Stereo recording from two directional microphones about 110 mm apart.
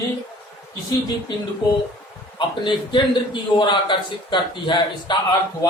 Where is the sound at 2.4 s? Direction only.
45° left (ahead or behind).